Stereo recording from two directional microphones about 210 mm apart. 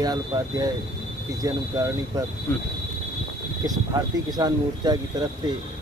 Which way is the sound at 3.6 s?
20° right (ahead or behind).